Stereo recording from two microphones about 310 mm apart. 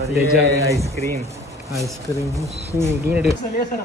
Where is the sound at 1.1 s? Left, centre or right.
Centre.